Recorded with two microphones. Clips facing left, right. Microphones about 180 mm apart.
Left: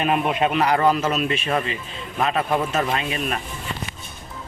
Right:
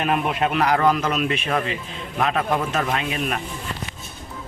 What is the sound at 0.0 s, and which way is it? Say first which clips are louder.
Speech: left 1 dB; centre (ahead or behind).